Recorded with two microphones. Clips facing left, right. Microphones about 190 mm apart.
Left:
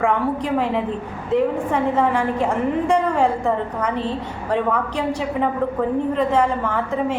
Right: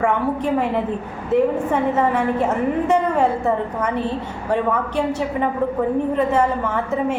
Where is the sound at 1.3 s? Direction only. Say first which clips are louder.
Right 2 dB; 10° right (ahead or behind).